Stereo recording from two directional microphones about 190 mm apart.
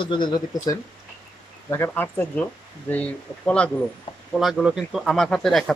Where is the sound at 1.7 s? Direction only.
10° left (ahead or behind).